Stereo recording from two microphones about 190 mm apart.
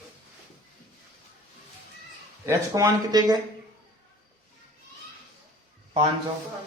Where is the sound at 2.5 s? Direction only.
15° right (ahead or behind).